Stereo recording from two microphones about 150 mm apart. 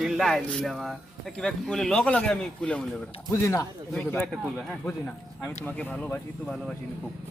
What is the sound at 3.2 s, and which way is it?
Speech, 15° left (ahead or behind).